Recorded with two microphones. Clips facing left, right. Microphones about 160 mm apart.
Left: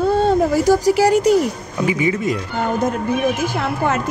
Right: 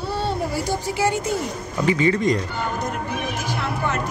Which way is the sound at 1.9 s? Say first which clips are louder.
Right 1 dB; 10° left (ahead or behind).